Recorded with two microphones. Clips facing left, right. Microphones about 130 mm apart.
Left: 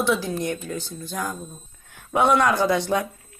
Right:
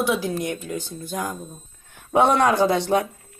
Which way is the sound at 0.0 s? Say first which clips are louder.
Even; 15° right (ahead or behind).